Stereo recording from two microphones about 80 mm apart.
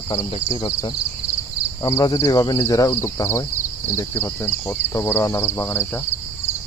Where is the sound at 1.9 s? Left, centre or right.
Left.